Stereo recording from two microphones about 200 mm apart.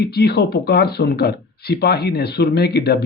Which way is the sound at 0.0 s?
55° left (ahead or behind).